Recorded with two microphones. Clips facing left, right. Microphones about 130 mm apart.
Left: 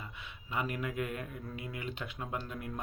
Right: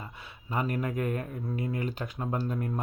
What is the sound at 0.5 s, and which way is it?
Speech, 40° right (ahead or behind).